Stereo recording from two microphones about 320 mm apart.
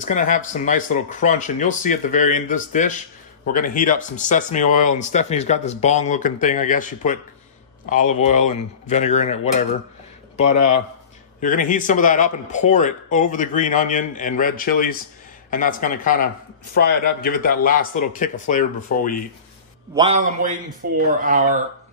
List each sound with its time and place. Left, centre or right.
0.0 s speech: left
10.5 s speech: left
11.4 s speech: left
19.9 s a man's voice: centre